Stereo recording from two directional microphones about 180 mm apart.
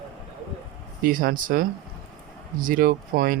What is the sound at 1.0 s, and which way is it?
Speech, 50° right (ahead or behind).